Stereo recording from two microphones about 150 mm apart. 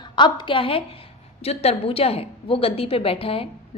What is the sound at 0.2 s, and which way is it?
A woman's voice, 30° left (ahead or behind).